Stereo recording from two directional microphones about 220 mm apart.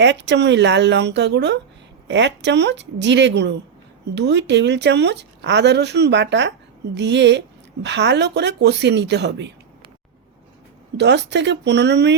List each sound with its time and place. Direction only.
0.0 s a woman's voice: 55° right (ahead or behind)
10.9 s a woman's voice: 50° right (ahead or behind)